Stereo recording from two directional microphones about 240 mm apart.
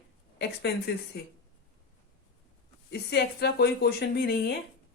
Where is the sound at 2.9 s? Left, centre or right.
Left.